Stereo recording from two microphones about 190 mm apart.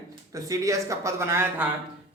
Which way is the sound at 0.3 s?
15° right (ahead or behind).